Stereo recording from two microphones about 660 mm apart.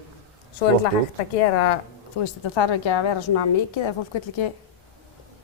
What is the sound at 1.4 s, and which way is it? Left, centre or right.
Speech, left.